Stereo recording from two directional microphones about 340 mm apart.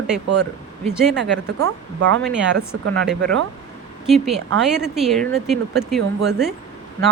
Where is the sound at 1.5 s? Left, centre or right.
Right.